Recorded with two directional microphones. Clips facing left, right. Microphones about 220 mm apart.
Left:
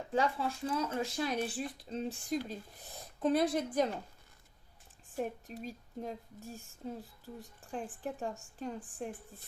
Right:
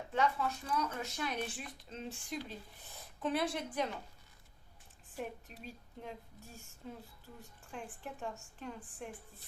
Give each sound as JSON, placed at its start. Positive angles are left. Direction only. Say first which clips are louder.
{"t": 0.1, "sound": "speech", "louder": "left 2 dB", "side_deg": 30}
{"t": 5.1, "sound": "speech", "louder": "left 6 dB", "side_deg": 45}